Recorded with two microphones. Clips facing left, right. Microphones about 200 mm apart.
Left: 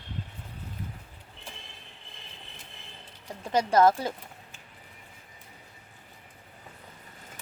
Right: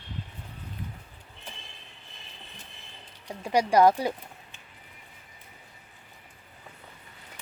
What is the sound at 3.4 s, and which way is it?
Speech, 15° right (ahead or behind).